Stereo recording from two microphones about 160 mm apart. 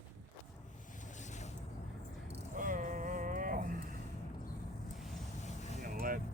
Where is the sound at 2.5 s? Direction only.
55° right (ahead or behind).